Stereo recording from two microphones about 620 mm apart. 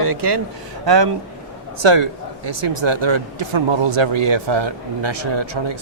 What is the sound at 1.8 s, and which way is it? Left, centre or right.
Speech, right.